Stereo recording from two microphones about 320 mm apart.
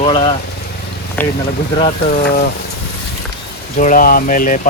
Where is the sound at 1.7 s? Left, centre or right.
Centre.